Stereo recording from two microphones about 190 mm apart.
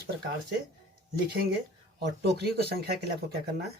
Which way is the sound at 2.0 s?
60° right (ahead or behind).